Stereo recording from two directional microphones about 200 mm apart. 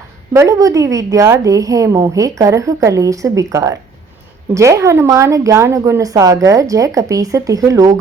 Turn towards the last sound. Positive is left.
turn(degrees=-15)  # may be behind; listen again after turning